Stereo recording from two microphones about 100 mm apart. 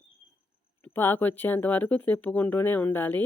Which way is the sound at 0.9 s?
20° left (ahead or behind).